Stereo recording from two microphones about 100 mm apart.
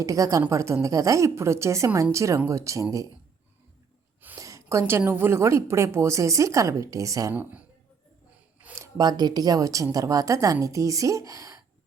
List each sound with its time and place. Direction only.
0.0 s a woman's voice: 35° right (ahead or behind)
4.4 s a woman's voice: 30° right (ahead or behind)
8.7 s a woman's voice: 35° right (ahead or behind)